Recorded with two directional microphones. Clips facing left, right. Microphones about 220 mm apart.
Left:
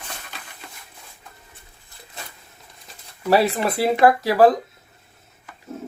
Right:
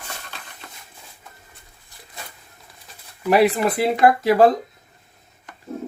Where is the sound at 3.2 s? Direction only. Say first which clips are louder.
Right 2 dB; 20° right (ahead or behind).